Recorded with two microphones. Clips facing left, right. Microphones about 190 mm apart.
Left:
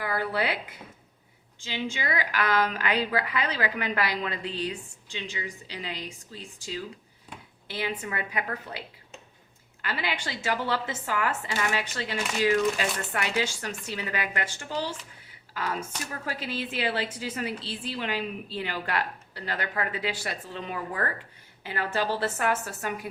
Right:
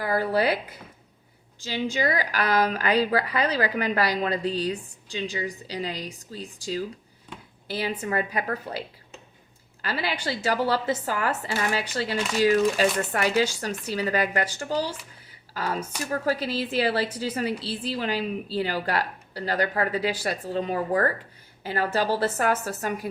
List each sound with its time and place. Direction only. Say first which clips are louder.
0.0 s speech: right 5 dB; 40° right (ahead or behind)
1.6 s a woman's voice: right 6 dB; 40° right (ahead or behind)
9.8 s a woman's voice: right 4 dB; 35° right (ahead or behind)